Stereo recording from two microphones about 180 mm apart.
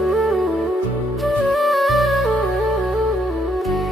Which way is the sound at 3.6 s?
Centre (ahead or behind).